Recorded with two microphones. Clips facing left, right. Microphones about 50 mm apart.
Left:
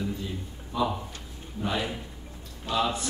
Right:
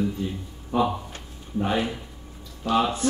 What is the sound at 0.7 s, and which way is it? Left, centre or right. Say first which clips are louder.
Speech: right 5 dB; right.